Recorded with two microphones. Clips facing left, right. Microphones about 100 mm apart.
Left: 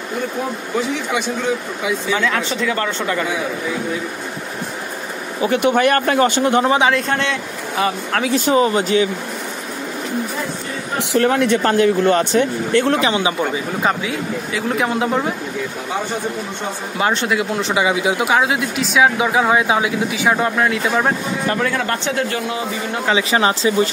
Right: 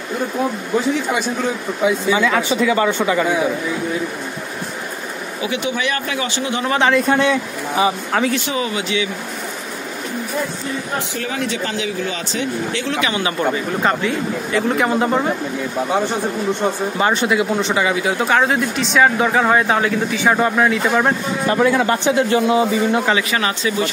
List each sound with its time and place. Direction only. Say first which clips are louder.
2.1 s a man's voice: right 3 dB; 5° right (ahead or behind)
5.4 s speech: left 7 dB; 55° left (ahead or behind)
6.9 s a man's voice: right 3 dB; 10° right (ahead or behind)
8.3 s speech: left 6 dB; 40° left (ahead or behind)
11.0 s speech: left 8 dB; 65° left (ahead or behind)
13.0 s speech: left 3 dB; 25° left (ahead or behind)
13.4 s speech: right 1 dB; 5° left (ahead or behind)
17.0 s speech: right 1 dB; centre (ahead or behind)
17.8 s speech: left 1 dB; 15° left (ahead or behind); by 21.1 s centre (ahead or behind)
21.5 s a man's voice: right 5 dB; 15° right (ahead or behind)
23.1 s speech: left 3 dB; 25° left (ahead or behind)